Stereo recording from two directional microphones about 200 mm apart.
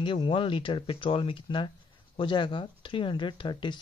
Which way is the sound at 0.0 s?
25° left (ahead or behind).